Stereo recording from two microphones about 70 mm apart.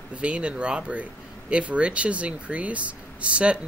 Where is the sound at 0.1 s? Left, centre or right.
Centre.